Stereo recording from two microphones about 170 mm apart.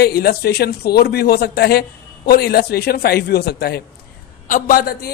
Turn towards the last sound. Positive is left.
turn(degrees=65)  # may be behind; listen again after turning